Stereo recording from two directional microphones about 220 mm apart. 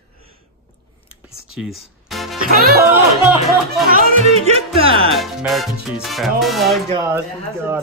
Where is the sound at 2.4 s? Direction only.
45° right (ahead or behind).